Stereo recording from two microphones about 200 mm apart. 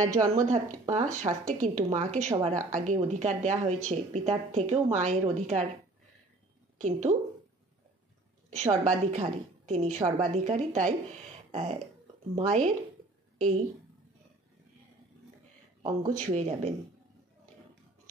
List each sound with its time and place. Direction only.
0.3 s a woman's voice: 35° right (ahead or behind)
6.8 s a woman's voice: 35° right (ahead or behind)
8.5 s a woman's voice: 35° right (ahead or behind)
15.8 s speech: 20° right (ahead or behind)
16.2 s a woman's voice: 35° right (ahead or behind)